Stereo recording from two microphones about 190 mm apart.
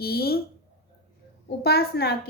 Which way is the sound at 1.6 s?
55° left (ahead or behind).